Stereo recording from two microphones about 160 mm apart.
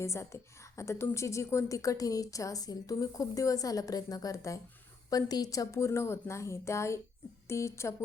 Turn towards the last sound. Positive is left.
turn(degrees=15)  # may be behind; listen again after turning